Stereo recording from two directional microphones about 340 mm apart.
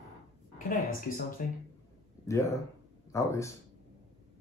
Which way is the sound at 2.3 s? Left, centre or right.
Centre.